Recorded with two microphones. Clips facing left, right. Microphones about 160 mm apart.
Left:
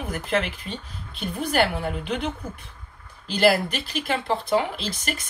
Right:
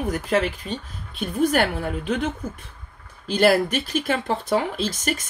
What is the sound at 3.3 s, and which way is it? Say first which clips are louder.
Speech: right 2 dB; 45° right (ahead or behind).